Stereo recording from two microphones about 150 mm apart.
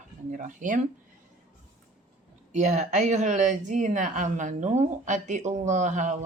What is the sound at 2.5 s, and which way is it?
A woman's voice, 50° right (ahead or behind).